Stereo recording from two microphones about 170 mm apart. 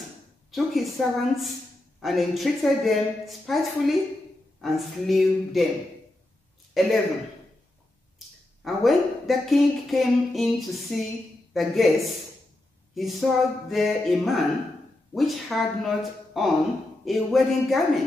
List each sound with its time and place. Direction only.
0.5 s speech: centre (ahead or behind)
6.7 s speech: centre (ahead or behind)
8.6 s speech: centre (ahead or behind)